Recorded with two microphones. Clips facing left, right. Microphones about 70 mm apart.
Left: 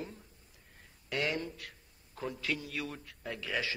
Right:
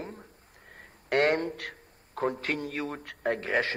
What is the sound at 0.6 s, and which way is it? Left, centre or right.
A man's voice, right.